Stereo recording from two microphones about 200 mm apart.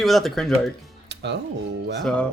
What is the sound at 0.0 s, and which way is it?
Speech, centre (ahead or behind).